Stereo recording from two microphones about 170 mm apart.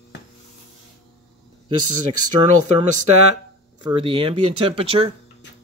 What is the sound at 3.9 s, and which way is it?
Speech, 30° right (ahead or behind).